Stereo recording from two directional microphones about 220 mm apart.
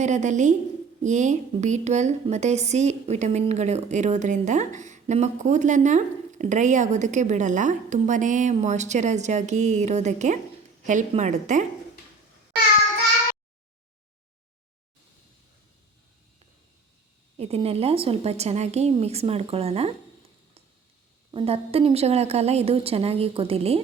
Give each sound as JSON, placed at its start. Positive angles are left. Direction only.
{"t": 0.0, "sound": "a woman's voice", "side_deg": -30}
{"t": 17.3, "sound": "a woman's voice", "side_deg": -30}
{"t": 21.3, "sound": "a woman's voice", "side_deg": -25}